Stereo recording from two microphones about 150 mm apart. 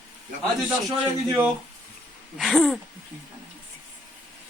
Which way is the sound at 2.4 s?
Centre (ahead or behind).